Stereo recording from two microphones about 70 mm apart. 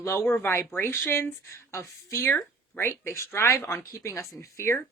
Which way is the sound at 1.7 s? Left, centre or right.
Left.